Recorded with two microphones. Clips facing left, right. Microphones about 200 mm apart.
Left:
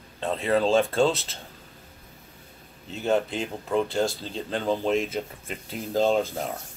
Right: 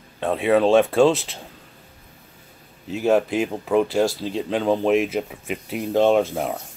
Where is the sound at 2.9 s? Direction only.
Centre (ahead or behind).